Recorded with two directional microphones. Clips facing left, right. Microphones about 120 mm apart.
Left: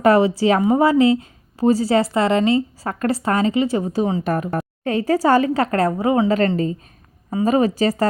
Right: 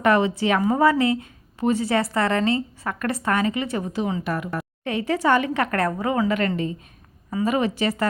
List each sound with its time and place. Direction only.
0.0 s a woman's voice: 30° left (ahead or behind)